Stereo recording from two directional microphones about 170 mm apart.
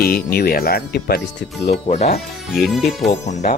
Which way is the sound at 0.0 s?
65° left (ahead or behind).